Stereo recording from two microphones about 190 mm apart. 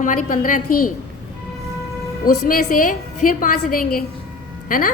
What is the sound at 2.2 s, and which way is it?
A woman's voice, 45° left (ahead or behind).